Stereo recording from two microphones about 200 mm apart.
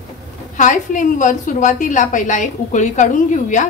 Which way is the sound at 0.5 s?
40° left (ahead or behind).